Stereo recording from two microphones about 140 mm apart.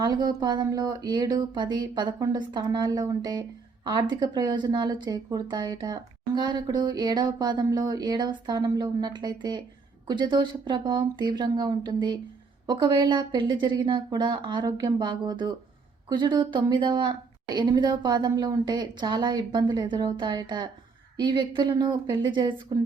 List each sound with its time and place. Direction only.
0.0 s speech: 30° right (ahead or behind)